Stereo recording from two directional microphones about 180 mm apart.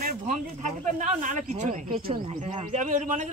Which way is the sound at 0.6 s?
45° right (ahead or behind).